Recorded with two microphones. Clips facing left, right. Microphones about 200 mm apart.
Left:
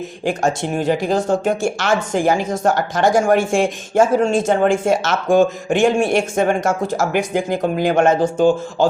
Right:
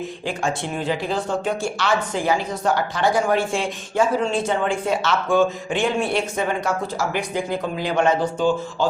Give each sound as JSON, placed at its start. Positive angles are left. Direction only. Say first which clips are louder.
{"t": 0.3, "sound": "speech", "louder": "left 7 dB", "side_deg": 45}